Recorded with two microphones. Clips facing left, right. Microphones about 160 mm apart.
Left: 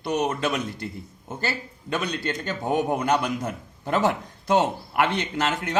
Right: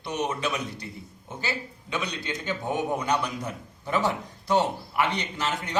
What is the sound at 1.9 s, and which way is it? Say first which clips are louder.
Speech: left 4 dB; 50° left (ahead or behind).